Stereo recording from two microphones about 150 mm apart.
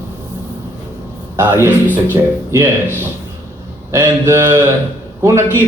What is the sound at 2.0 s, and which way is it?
A man's voice, 15° right (ahead or behind).